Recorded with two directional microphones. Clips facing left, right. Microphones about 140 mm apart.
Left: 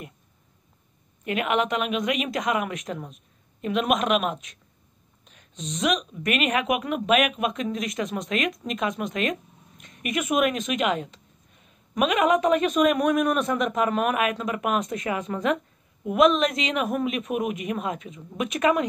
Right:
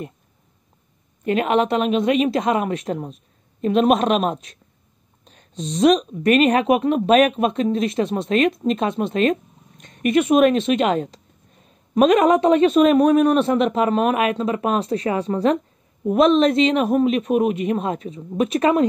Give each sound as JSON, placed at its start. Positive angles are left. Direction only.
{"t": 1.2, "sound": "a woman's voice", "side_deg": -35}